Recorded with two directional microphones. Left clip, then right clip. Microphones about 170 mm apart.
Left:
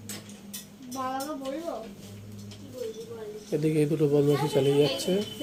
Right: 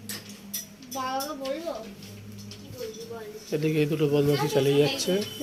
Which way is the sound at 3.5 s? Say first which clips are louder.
Even; 5° left (ahead or behind).